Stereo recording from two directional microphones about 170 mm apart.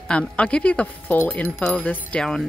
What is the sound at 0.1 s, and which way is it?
A woman's voice, 5° left (ahead or behind).